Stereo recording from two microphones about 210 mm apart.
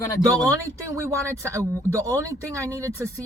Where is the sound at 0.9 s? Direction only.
15° right (ahead or behind).